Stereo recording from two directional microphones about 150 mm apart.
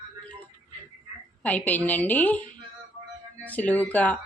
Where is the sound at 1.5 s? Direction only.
10° left (ahead or behind).